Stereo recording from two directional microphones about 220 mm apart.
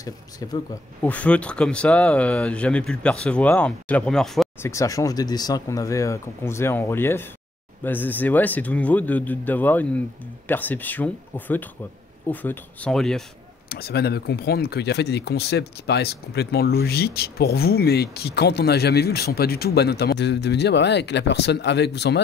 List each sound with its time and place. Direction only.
0.0 s speech: 15° left (ahead or behind)
4.6 s speech: 15° left (ahead or behind)
13.7 s speech: 45° left (ahead or behind)